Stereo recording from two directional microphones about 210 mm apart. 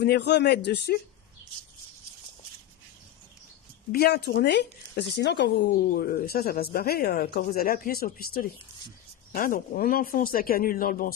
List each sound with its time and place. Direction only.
0.0 s speech: 55° left (ahead or behind)
3.9 s speech: 50° left (ahead or behind)